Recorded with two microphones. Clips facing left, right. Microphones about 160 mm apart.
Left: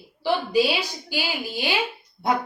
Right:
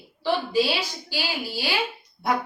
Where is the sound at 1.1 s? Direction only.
20° left (ahead or behind).